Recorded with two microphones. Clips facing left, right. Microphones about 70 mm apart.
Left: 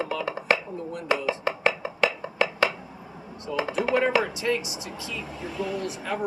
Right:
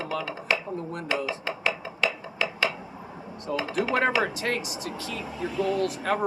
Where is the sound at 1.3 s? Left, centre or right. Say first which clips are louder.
Left 4 dB; left.